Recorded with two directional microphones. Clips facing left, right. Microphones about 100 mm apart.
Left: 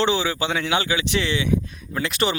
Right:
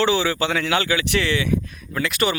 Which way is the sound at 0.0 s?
20° left (ahead or behind).